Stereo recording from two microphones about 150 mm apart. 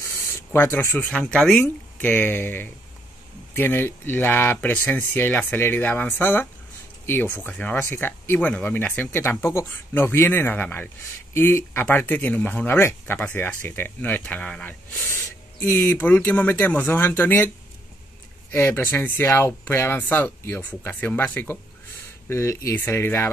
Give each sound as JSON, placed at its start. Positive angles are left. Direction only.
{"t": 0.0, "sound": "speech", "side_deg": 15}
{"t": 18.5, "sound": "speech", "side_deg": 15}